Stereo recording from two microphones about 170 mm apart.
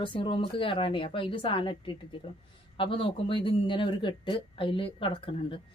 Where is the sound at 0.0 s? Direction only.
30° left (ahead or behind).